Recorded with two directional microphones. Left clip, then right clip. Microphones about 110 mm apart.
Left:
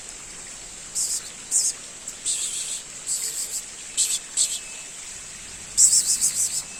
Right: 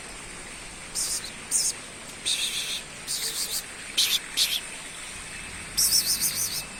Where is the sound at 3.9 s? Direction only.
5° right (ahead or behind).